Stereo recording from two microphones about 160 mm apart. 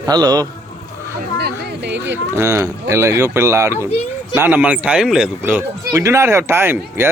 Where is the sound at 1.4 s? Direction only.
90° right.